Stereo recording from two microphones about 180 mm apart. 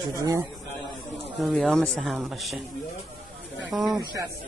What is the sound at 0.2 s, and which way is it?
Speech, 20° right (ahead or behind).